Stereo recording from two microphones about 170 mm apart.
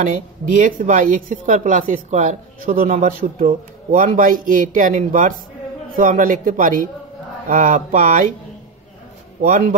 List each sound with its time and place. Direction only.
0.0 s speech: 50° right (ahead or behind)
9.4 s speech: 50° right (ahead or behind)